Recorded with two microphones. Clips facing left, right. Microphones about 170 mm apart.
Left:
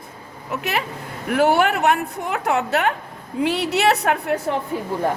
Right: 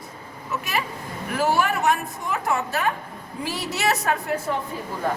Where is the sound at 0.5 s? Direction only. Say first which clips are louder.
Left 3 dB; 60° left (ahead or behind).